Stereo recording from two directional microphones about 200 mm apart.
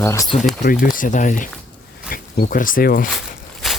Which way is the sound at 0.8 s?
40° left (ahead or behind).